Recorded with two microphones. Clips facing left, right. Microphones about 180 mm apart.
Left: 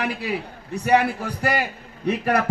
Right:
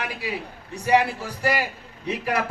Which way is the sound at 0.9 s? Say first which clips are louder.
Left 1 dB; 55° left (ahead or behind).